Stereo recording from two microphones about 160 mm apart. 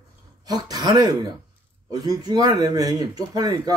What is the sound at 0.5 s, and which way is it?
Speech, 25° right (ahead or behind).